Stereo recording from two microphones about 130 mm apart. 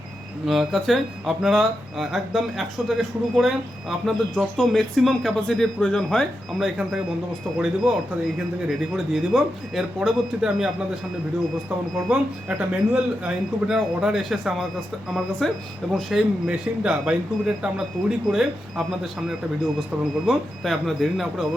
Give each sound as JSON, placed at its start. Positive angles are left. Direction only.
{"t": 0.4, "sound": "speech", "side_deg": 0}
{"t": 11.9, "sound": "speech", "side_deg": -5}
{"t": 20.2, "sound": "speech", "side_deg": 0}